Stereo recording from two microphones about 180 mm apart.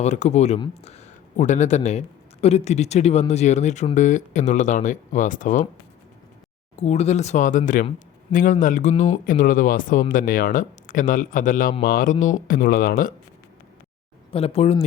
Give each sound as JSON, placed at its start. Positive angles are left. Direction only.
{"t": 0.0, "sound": "speech", "side_deg": 40}
{"t": 6.7, "sound": "speech", "side_deg": 40}
{"t": 14.3, "sound": "speech", "side_deg": 35}